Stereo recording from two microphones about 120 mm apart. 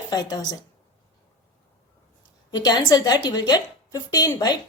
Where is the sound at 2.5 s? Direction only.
35° left (ahead or behind).